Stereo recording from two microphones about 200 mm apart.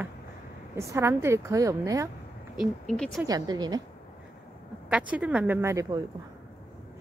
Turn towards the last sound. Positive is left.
turn(degrees=-15)  # may be behind; listen again after turning